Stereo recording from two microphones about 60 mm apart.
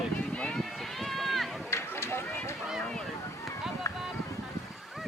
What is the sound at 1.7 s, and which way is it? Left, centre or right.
Run, left.